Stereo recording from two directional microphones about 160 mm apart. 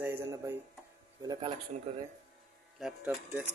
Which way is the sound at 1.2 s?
25° right (ahead or behind).